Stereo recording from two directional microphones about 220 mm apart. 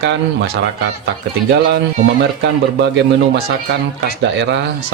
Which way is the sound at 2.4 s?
50° right (ahead or behind).